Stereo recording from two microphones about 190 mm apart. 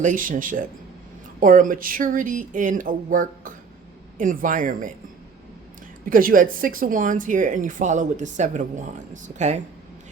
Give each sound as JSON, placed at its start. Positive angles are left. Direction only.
{"t": 0.0, "sound": "speech", "side_deg": -45}
{"t": 6.1, "sound": "speech", "side_deg": -45}